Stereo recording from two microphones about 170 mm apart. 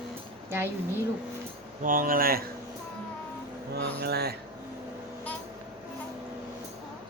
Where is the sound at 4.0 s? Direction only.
70° right (ahead or behind).